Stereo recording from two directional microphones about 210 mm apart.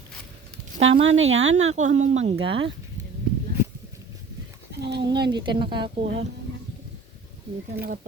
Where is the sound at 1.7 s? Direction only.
35° right (ahead or behind).